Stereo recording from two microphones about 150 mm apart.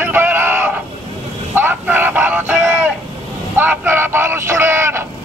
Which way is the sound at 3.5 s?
15° right (ahead or behind).